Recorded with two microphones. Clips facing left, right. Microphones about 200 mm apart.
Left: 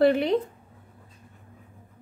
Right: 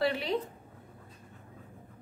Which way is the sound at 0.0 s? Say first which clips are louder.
Left 9 dB; 50° left (ahead or behind).